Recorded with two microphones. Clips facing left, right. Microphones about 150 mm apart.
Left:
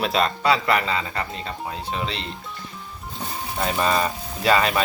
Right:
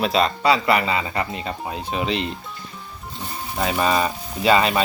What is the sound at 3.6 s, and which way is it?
Speech, 5° right (ahead or behind).